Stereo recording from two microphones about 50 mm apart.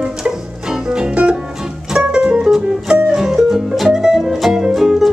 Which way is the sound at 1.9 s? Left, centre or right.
Centre.